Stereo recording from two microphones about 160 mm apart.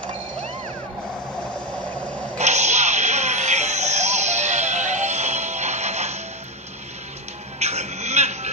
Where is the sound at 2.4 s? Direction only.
45° right (ahead or behind).